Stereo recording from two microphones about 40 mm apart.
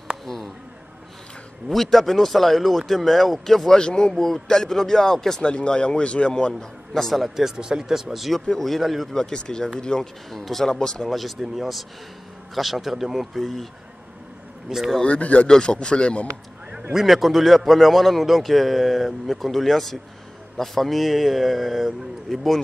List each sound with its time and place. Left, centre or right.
1.7 s a man's voice: centre
3.7 s speech: centre
5.4 s speech: left
6.9 s speech: centre
7.5 s a man's voice: centre
9.1 s speech: centre
10.3 s speech: centre
11.1 s a man's voice: centre
11.4 s a man's voice: centre
14.7 s speech: centre
15.0 s speech: left
15.4 s speech: left
16.9 s a man's voice: centre